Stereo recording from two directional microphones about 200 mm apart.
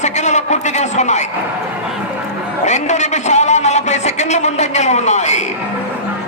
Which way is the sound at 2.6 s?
35° left (ahead or behind).